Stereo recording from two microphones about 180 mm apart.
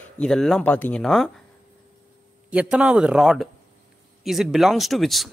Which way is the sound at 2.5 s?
5° right (ahead or behind).